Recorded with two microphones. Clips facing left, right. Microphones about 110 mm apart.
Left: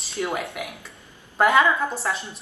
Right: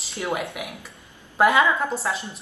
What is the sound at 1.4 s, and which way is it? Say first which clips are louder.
Speech: even; 5° right (ahead or behind).